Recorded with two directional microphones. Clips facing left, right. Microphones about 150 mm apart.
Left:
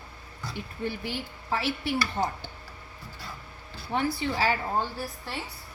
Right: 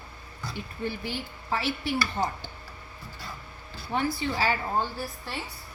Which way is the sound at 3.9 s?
65° left (ahead or behind).